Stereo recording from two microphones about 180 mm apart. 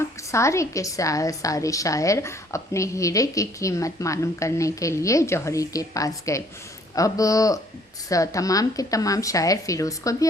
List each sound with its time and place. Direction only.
0.3 s a woman's voice: 15° left (ahead or behind)